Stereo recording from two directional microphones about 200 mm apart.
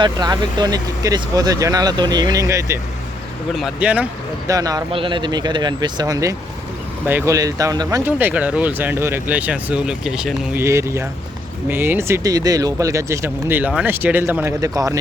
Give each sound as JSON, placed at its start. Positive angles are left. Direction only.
{"t": 0.0, "sound": "speech", "side_deg": -20}
{"t": 3.5, "sound": "speech", "side_deg": -5}
{"t": 10.6, "sound": "speech", "side_deg": -15}